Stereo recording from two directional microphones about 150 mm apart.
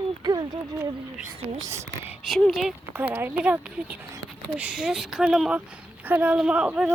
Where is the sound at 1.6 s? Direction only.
20° right (ahead or behind).